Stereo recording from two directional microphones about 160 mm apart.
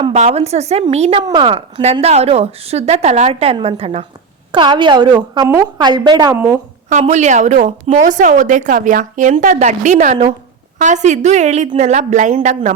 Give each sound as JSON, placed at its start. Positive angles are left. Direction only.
{"t": 0.0, "sound": "a woman's voice", "side_deg": -40}
{"t": 1.2, "sound": "a woman's voice", "side_deg": -30}
{"t": 6.3, "sound": "a woman's voice", "side_deg": -15}
{"t": 6.9, "sound": "a woman's voice", "side_deg": -45}